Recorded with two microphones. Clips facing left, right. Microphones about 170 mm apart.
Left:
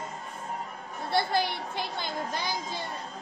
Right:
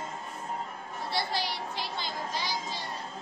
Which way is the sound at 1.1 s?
55° left (ahead or behind).